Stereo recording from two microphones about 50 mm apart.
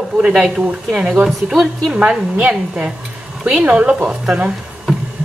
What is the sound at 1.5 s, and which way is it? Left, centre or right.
Speech, centre.